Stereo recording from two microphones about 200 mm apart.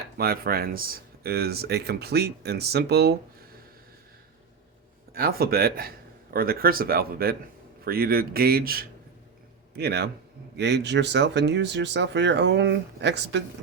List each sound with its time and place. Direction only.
0.2 s speech: 50° right (ahead or behind)
5.1 s speech: 50° right (ahead or behind)